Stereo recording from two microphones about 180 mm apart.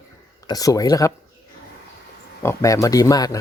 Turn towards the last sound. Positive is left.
turn(degrees=20)  # may be behind; listen again after turning